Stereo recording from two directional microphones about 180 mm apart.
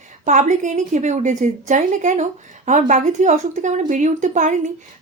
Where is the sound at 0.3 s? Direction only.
45° right (ahead or behind).